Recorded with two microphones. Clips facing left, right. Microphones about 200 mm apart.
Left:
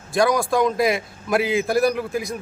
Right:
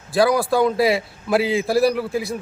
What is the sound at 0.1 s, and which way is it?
A man's voice, 30° right (ahead or behind).